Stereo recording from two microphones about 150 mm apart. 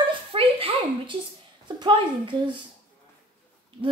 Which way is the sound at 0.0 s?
35° right (ahead or behind).